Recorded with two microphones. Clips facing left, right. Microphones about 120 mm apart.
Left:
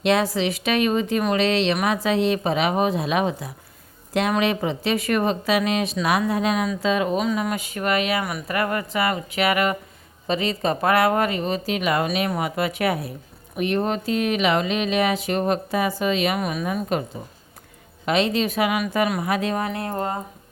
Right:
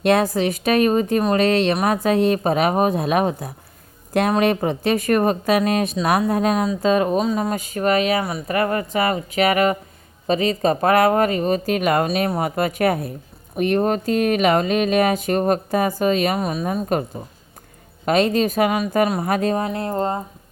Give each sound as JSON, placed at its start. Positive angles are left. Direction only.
{"t": 0.0, "sound": "speech", "side_deg": -50}
{"t": 18.0, "sound": "speech", "side_deg": -45}
{"t": 19.5, "sound": "speech", "side_deg": -25}